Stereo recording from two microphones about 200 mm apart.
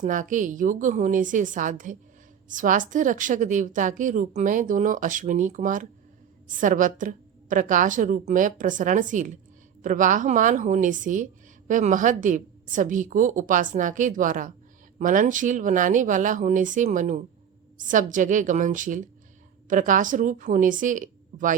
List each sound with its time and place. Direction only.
0.0 s speech: 40° right (ahead or behind)